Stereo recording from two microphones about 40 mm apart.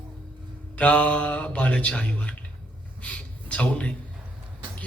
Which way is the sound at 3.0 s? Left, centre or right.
Left.